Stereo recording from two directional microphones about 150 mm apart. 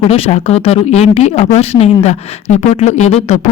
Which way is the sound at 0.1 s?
45° left (ahead or behind).